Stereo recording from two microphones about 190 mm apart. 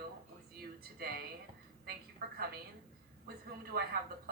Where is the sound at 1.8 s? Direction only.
55° right (ahead or behind).